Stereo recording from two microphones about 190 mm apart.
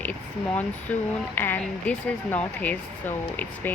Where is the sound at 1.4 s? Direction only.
10° left (ahead or behind).